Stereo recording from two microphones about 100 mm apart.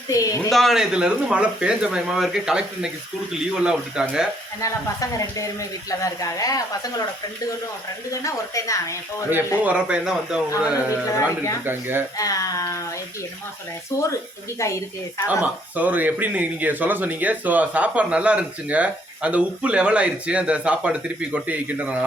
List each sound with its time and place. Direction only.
0.1 s speech: 35° left (ahead or behind)
0.5 s speech: centre (ahead or behind)
4.6 s speech: 35° left (ahead or behind)
8.1 s speech: 35° left (ahead or behind)
9.6 s speech: 15° right (ahead or behind)
11.1 s speech: 35° left (ahead or behind)
11.6 s speech: 20° right (ahead or behind)
12.1 s speech: 35° left (ahead or behind)
13.9 s speech: 30° left (ahead or behind)
15.3 s speech: 15° right (ahead or behind)